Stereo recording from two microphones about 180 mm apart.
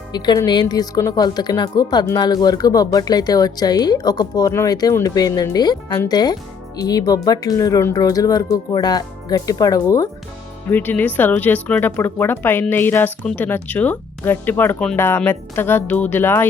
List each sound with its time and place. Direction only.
0.1 s speech: 25° left (ahead or behind)